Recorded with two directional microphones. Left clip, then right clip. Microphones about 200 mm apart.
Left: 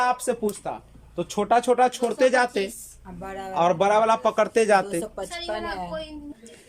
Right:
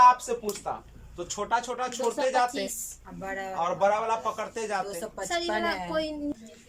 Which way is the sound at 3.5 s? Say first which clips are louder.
Left 6 dB; 55° left (ahead or behind).